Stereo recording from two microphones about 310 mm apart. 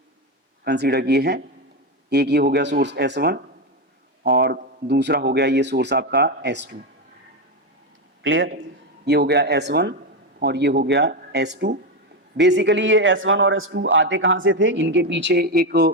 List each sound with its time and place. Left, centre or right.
0.6 s a man's voice: right
8.2 s a man's voice: right